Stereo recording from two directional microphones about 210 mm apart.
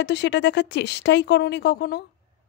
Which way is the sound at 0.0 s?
55° left (ahead or behind).